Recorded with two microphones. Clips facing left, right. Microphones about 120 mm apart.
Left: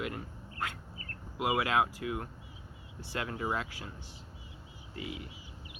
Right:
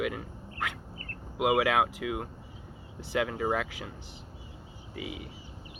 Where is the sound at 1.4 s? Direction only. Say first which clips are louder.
Right 4 dB; 90° right.